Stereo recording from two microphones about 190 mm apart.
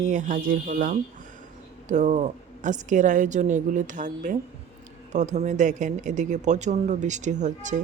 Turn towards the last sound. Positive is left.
turn(degrees=-40)  # may be behind; listen again after turning